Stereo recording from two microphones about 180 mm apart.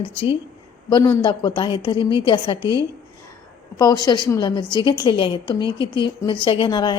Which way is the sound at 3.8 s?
20° left (ahead or behind).